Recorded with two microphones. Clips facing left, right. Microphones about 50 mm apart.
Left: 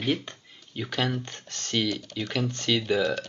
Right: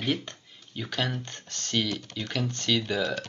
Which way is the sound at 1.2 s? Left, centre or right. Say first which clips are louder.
Left 1 dB; left.